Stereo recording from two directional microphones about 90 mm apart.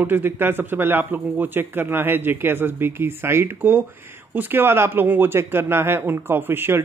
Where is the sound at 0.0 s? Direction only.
20° right (ahead or behind).